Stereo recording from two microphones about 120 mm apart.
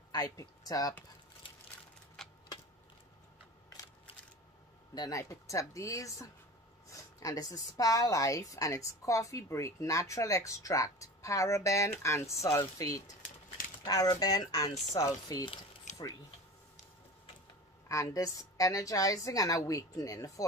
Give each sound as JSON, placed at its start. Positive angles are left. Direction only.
{"t": 0.1, "sound": "speech", "side_deg": 30}
{"t": 2.2, "sound": "a sound", "side_deg": 5}
{"t": 4.9, "sound": "a woman's voice", "side_deg": 30}
{"t": 14.7, "sound": "speech", "side_deg": 0}
{"t": 15.0, "sound": "speech", "side_deg": 30}
{"t": 15.9, "sound": "a sound", "side_deg": 90}
{"t": 17.8, "sound": "a woman's voice", "side_deg": 25}